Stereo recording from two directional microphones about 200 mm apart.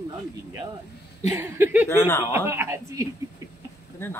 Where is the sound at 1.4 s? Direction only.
10° right (ahead or behind).